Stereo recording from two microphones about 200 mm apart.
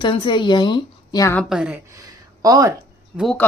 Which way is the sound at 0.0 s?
25° left (ahead or behind).